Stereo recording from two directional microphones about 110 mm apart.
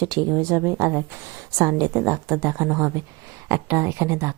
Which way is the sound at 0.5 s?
25° right (ahead or behind).